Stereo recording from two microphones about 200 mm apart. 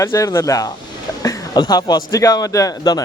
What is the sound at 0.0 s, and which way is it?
A man's voice, 15° left (ahead or behind).